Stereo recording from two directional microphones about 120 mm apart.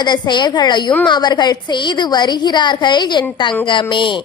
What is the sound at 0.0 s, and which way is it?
A woman's voice, 40° left (ahead or behind).